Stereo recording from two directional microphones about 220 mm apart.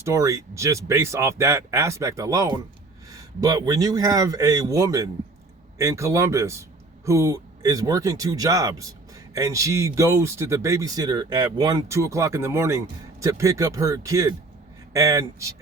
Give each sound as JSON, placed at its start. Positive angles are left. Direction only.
{"t": 0.0, "sound": "speech", "side_deg": -15}